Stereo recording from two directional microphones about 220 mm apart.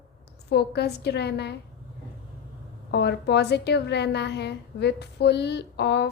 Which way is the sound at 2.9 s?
50° left (ahead or behind).